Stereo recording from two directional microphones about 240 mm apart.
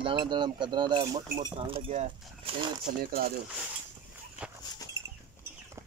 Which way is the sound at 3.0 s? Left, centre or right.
Right.